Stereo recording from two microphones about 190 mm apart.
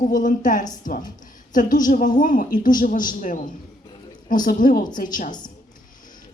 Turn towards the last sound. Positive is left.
turn(degrees=45)  # may be behind; listen again after turning